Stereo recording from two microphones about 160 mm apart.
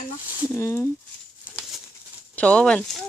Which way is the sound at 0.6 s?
15° left (ahead or behind).